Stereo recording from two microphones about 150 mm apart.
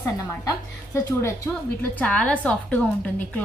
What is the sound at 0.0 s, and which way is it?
A woman's voice, 20° left (ahead or behind).